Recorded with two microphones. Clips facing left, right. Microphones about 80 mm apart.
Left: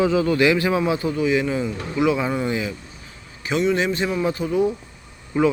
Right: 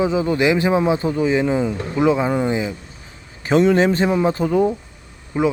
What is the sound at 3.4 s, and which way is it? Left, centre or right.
A man's voice, right.